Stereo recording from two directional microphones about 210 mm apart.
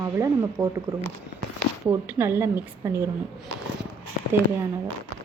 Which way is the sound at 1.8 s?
10° right (ahead or behind).